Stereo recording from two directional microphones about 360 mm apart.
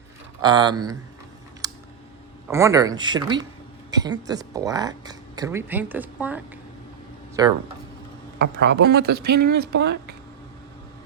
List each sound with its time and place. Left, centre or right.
0.4 s speech: centre
1.6 s typing: centre
2.5 s speech: centre
8.4 s speech: right
9.3 s speech: right
9.6 s speech: right